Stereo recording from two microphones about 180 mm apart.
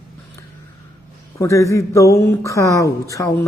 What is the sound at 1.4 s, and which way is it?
A man's voice, 15° left (ahead or behind).